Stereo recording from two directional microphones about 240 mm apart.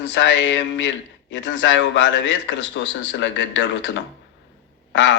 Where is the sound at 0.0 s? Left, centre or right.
Left.